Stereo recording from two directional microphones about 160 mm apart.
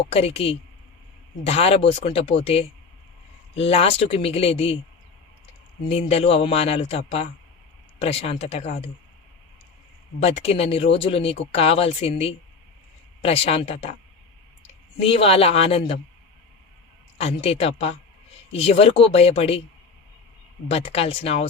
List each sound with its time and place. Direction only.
0.0 s speech: 40° left (ahead or behind)
5.9 s speech: 35° left (ahead or behind)
10.2 s speech: 40° left (ahead or behind)
14.9 s speech: 35° left (ahead or behind)
17.2 s speech: 40° left (ahead or behind)
20.7 s speech: 40° left (ahead or behind)